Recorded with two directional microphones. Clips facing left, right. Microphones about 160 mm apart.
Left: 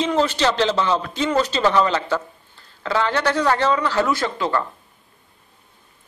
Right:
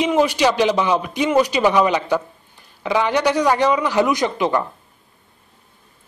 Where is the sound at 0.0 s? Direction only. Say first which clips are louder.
Right 3 dB; 15° right (ahead or behind).